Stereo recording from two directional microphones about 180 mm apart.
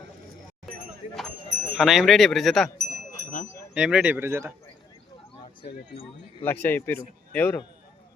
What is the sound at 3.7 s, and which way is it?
Speech, 5° right (ahead or behind).